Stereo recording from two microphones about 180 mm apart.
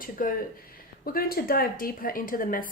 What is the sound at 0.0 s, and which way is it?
A woman's voice, 50° left (ahead or behind).